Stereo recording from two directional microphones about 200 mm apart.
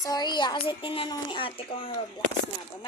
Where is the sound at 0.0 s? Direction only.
20° left (ahead or behind).